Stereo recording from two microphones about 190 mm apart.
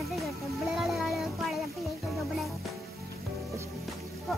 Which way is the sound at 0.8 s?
Centre (ahead or behind).